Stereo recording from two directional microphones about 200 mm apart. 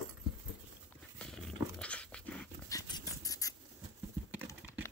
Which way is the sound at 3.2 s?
15° left (ahead or behind).